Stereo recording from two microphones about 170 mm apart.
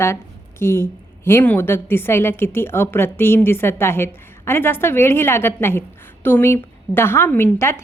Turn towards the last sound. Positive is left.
turn(degrees=15)  # may be behind; listen again after turning